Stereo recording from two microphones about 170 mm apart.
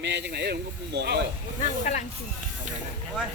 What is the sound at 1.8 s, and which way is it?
Speech, 45° left (ahead or behind).